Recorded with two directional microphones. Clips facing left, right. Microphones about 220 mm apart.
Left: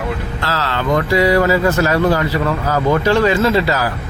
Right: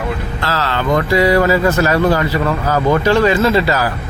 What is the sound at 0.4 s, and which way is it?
Speech, 60° right (ahead or behind).